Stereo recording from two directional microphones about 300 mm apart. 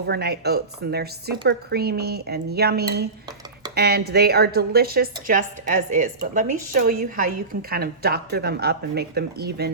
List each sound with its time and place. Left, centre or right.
0.0 s a woman's voice: right